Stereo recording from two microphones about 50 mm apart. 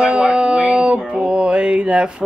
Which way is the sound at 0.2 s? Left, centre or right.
Centre.